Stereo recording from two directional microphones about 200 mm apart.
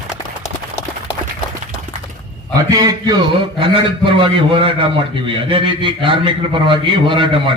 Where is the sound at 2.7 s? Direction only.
20° right (ahead or behind).